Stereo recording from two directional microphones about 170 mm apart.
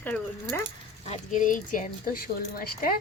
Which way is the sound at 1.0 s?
45° left (ahead or behind).